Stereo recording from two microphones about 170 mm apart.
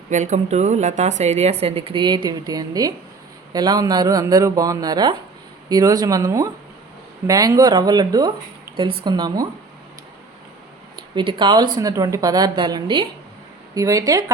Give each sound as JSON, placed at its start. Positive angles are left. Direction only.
{"t": 0.1, "sound": "a woman's voice", "side_deg": -45}
{"t": 10.9, "sound": "a woman's voice", "side_deg": -30}